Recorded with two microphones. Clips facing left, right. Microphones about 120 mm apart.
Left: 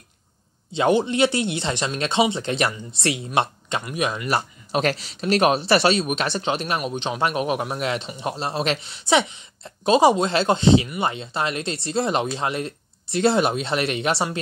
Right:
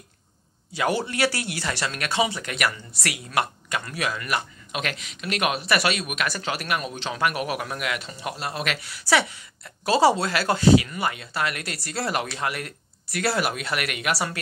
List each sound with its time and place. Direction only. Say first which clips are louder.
0.7 s speech: left 6 dB; 20° left (ahead or behind)
4.3 s speech: left 5 dB; 35° left (ahead or behind)